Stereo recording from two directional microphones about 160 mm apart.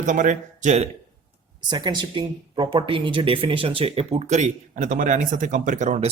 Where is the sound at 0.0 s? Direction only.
55° right (ahead or behind).